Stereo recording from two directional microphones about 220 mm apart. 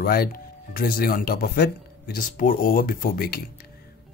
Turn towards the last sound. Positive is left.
turn(degrees=45)  # may be behind; listen again after turning